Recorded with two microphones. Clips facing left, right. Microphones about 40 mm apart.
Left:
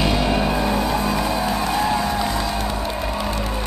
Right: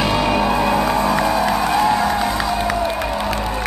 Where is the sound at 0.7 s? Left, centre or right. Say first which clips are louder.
Right 4 dB; right.